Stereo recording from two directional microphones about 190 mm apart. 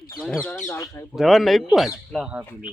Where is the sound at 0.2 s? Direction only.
5° left (ahead or behind).